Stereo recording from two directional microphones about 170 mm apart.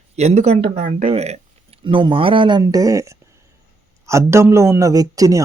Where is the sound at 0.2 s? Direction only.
40° right (ahead or behind).